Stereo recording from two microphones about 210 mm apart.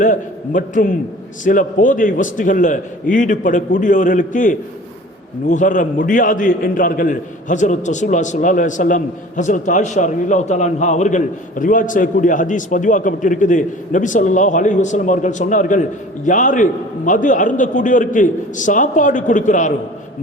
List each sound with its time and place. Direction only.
0.0 s a man's voice: 40° left (ahead or behind)